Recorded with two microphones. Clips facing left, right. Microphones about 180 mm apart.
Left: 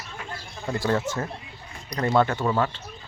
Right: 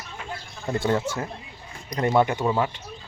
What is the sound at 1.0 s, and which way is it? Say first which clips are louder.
Speech: even; 10° right (ahead or behind).